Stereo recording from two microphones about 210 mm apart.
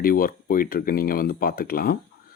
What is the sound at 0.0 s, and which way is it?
Speech, 45° left (ahead or behind).